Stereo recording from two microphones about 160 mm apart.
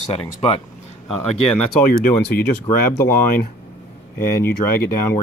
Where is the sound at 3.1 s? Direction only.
65° left (ahead or behind).